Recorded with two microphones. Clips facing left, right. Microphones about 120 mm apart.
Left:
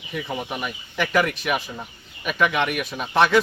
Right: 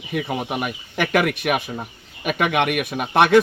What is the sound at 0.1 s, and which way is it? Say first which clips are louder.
A man's voice: right 4 dB; 60° right (ahead or behind).